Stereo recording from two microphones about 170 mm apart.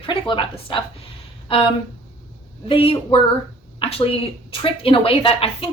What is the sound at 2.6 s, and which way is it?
Speech, 30° left (ahead or behind).